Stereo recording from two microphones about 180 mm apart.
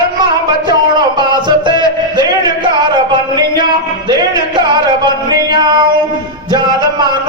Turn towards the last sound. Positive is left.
turn(degrees=-25)  # may be behind; listen again after turning